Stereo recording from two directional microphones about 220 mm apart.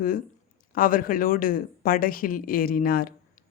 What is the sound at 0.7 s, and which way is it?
Speech, 40° left (ahead or behind).